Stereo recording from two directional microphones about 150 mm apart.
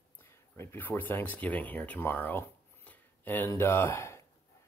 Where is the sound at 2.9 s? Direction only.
15° left (ahead or behind).